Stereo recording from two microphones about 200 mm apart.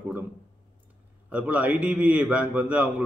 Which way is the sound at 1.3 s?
5° right (ahead or behind).